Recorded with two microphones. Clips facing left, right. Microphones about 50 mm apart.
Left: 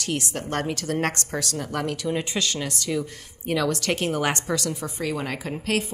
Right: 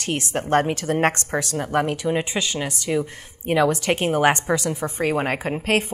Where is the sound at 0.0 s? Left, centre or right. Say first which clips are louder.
Right 3 dB; right.